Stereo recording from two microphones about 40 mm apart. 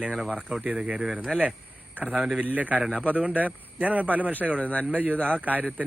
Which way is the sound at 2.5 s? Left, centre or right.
Right.